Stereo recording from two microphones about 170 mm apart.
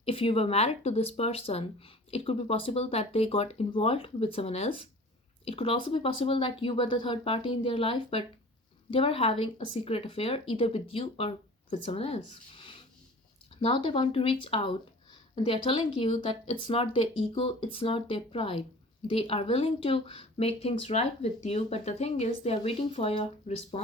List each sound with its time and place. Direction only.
0.0 s speech: 35° left (ahead or behind)